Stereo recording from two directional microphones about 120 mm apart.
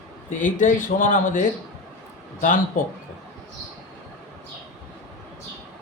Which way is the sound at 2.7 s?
90° left.